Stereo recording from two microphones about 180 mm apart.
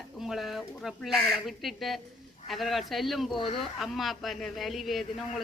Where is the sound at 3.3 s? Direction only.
30° left (ahead or behind).